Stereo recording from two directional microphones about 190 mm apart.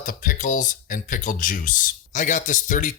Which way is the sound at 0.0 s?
45° left (ahead or behind).